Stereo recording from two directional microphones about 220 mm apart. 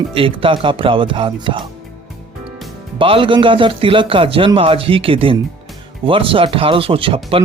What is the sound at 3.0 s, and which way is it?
A man's voice, 25° right (ahead or behind).